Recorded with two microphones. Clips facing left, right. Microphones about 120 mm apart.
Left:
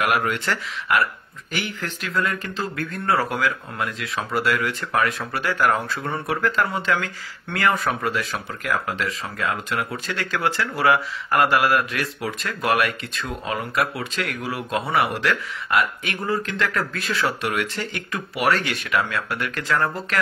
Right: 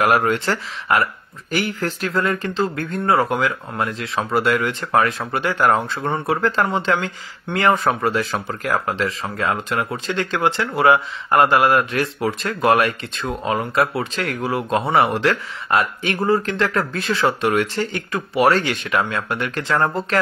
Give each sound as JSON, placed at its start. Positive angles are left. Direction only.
{"t": 0.0, "sound": "speech", "side_deg": -35}
{"t": 1.5, "sound": "speech", "side_deg": -40}